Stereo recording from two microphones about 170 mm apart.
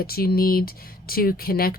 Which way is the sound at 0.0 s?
65° left (ahead or behind).